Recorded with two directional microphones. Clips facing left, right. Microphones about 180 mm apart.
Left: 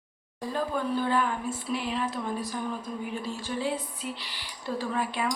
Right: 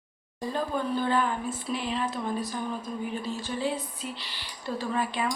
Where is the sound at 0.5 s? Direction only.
5° left (ahead or behind).